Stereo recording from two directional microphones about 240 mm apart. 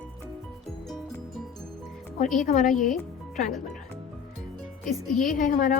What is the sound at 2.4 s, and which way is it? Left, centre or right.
Speech, left.